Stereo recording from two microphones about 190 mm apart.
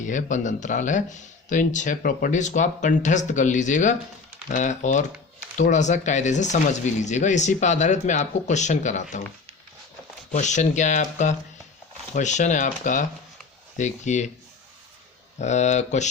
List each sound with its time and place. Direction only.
0.0 s speech: 40° left (ahead or behind)
10.3 s speech: 40° left (ahead or behind)
15.4 s speech: 40° left (ahead or behind)